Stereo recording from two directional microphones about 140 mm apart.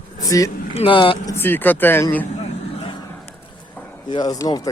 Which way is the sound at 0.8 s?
40° left (ahead or behind).